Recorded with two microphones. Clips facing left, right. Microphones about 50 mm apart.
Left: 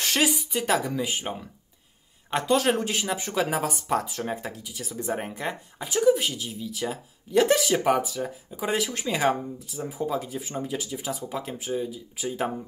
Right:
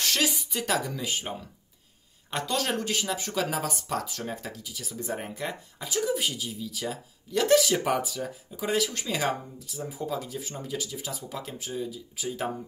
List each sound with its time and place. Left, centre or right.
0.0 s speech: centre
2.3 s speech: centre
6.0 s speech: centre